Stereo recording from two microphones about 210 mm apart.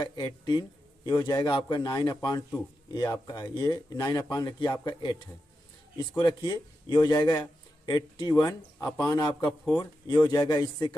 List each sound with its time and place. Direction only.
0.0 s a man's voice: 20° left (ahead or behind)